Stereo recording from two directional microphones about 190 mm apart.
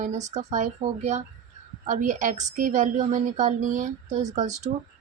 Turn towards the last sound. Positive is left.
turn(degrees=-45)  # may be behind; listen again after turning